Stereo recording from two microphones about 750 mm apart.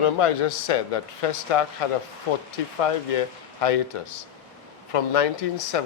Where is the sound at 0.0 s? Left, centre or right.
Left.